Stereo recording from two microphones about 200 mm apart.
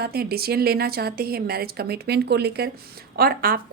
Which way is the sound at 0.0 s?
50° right (ahead or behind).